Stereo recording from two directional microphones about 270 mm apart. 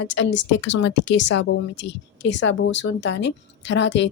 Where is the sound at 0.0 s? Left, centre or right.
Left.